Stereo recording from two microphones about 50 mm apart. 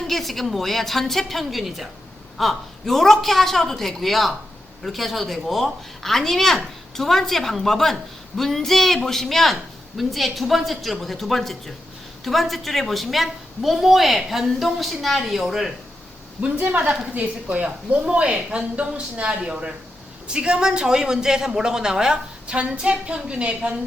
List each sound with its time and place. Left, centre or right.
0.1 s a woman's voice: centre
16.4 s a man's voice: right